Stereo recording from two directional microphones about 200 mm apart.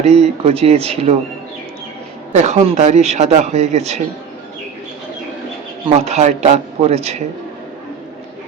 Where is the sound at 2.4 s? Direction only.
35° right (ahead or behind).